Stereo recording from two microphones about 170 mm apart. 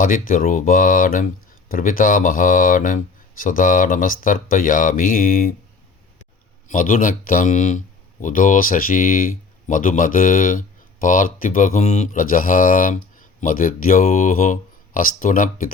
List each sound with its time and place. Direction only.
0.0 s speech: 50° left (ahead or behind)
6.7 s speech: 50° left (ahead or behind)